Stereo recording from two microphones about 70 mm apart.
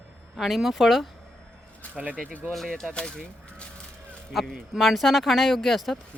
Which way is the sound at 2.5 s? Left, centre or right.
Centre.